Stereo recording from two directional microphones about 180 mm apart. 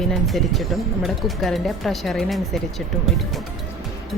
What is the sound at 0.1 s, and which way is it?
Speech, centre (ahead or behind).